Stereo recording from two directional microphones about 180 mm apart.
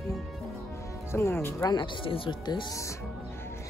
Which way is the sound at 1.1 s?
15° left (ahead or behind).